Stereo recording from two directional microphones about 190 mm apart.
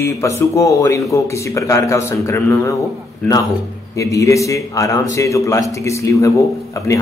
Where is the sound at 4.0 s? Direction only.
15° left (ahead or behind).